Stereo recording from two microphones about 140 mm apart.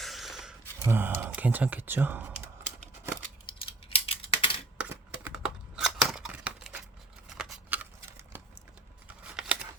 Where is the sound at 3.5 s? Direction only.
40° left (ahead or behind).